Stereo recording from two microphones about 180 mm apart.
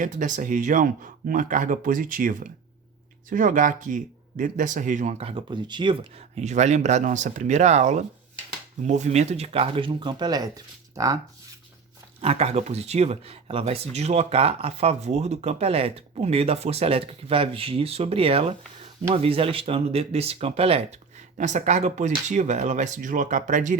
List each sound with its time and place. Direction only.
0.0 s speech: 45° right (ahead or behind); by 6.2 s 25° right (ahead or behind)
6.4 s speech: 40° right (ahead or behind); by 11.2 s 20° right (ahead or behind)
12.2 s speech: 35° right (ahead or behind)